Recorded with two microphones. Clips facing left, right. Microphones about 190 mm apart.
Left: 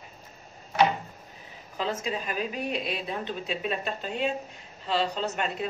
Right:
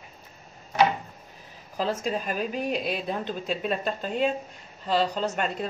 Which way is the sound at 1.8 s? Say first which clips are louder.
Right 3 dB; 40° right (ahead or behind).